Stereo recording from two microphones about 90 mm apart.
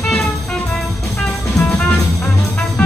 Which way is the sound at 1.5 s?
5° left (ahead or behind).